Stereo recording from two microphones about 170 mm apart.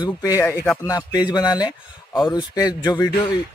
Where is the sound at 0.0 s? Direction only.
20° left (ahead or behind).